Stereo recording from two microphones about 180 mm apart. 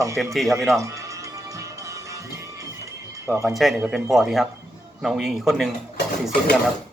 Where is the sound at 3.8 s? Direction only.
Centre (ahead or behind).